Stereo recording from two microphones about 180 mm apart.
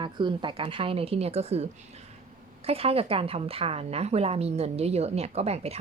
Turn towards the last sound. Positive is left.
turn(degrees=-35)  # may be behind; listen again after turning